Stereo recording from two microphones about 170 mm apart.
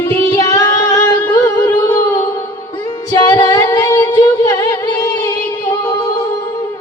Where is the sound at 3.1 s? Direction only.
25° left (ahead or behind).